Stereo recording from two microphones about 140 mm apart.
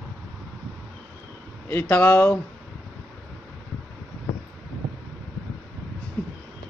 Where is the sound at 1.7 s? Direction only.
15° left (ahead or behind).